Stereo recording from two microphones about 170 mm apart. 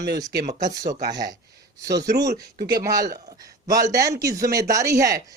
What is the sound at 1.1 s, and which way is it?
Speech, 20° right (ahead or behind).